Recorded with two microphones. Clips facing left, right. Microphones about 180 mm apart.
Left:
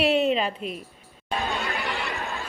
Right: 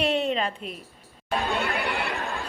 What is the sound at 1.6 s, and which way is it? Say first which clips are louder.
Chatter: right 2 dB; 60° right (ahead or behind).